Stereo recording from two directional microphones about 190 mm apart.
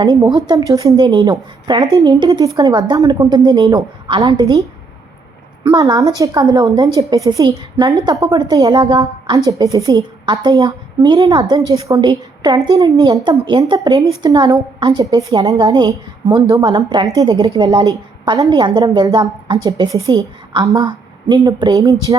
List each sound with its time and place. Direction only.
0.0 s a woman's voice: 15° right (ahead or behind)
5.6 s a woman's voice: 20° right (ahead or behind)